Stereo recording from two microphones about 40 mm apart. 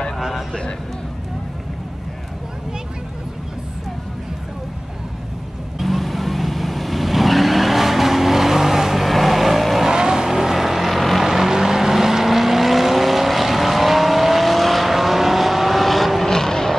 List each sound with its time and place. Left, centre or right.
0.5 s a sound: left
5.8 s vehicle: centre
9.8 s vehicle: centre
16.3 s vehicle: centre